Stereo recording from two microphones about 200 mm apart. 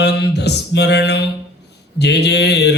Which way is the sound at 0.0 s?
55° left (ahead or behind).